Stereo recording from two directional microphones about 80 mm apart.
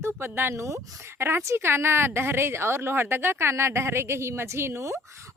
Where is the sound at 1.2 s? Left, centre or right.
Right.